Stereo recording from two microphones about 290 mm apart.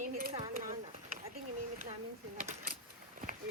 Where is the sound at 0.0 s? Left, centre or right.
Right.